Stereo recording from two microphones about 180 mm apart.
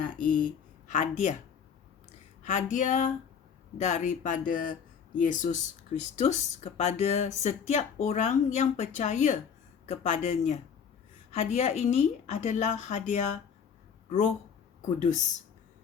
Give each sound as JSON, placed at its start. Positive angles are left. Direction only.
{"t": 0.0, "sound": "speech", "side_deg": 45}
{"t": 2.4, "sound": "a woman's voice", "side_deg": 45}
{"t": 14.8, "sound": "speech", "side_deg": 40}